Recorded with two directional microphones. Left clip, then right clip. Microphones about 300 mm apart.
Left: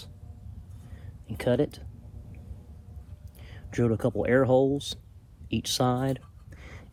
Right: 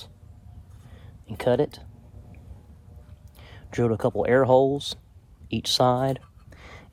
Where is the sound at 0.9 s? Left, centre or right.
Right.